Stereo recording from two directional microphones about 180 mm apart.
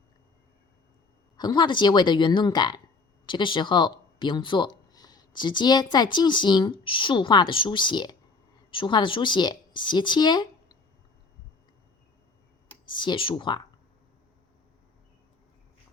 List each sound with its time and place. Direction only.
1.4 s speech: 25° left (ahead or behind)
13.0 s speech: 25° left (ahead or behind)